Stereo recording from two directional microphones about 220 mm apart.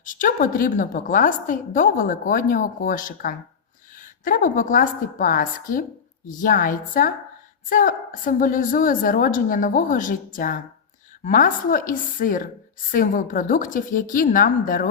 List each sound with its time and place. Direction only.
0.0 s a woman's voice: 35° left (ahead or behind)